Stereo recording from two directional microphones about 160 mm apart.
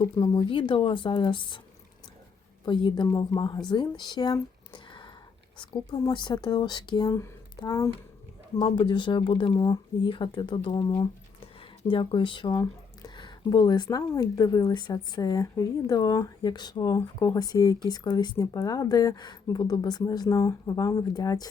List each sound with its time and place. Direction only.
0.0 s speech: 30° left (ahead or behind)
2.6 s speech: 30° left (ahead or behind)